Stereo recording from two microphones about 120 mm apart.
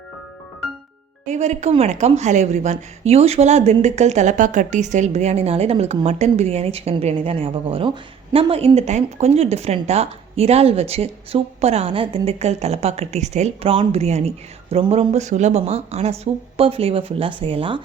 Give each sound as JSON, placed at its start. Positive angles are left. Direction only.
{"t": 1.3, "sound": "a woman's voice", "side_deg": -75}